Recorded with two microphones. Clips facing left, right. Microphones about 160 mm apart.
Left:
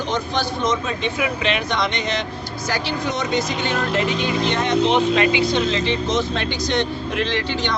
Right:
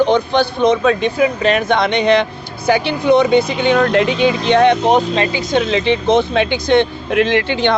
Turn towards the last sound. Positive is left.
turn(degrees=-60)  # may be behind; listen again after turning